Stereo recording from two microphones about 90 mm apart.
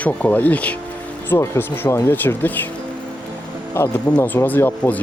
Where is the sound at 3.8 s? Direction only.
25° left (ahead or behind).